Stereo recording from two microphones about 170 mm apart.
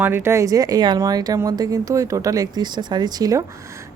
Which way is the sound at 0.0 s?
15° right (ahead or behind).